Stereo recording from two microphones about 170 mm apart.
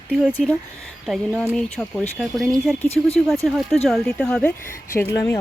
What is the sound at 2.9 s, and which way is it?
Speech, 35° left (ahead or behind).